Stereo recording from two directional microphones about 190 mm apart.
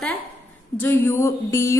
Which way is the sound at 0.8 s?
10° left (ahead or behind).